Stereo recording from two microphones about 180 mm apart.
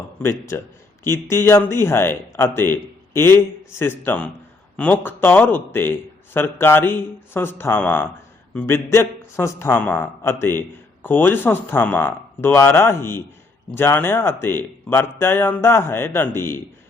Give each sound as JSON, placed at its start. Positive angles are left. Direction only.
{"t": 0.2, "sound": "a man's voice", "side_deg": 15}